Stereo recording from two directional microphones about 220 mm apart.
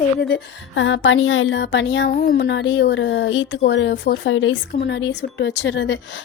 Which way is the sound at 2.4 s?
55° left (ahead or behind).